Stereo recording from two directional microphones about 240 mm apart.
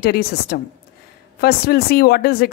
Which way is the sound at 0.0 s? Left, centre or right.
Left.